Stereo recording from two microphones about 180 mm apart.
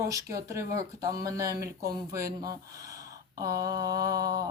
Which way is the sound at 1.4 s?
60° right (ahead or behind).